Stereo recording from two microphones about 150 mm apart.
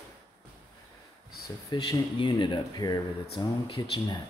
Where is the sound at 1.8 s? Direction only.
30° left (ahead or behind).